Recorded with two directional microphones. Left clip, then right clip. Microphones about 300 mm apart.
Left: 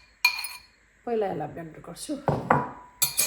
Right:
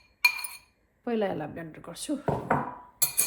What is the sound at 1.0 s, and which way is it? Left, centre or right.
Speech, right.